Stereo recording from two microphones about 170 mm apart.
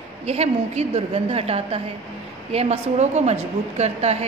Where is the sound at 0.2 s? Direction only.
40° right (ahead or behind).